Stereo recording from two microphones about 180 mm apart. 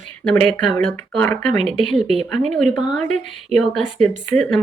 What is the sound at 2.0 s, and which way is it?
Speech, 40° right (ahead or behind).